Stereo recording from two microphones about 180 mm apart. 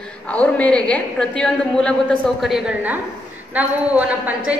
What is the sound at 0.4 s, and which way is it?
A woman's voice, 5° left (ahead or behind).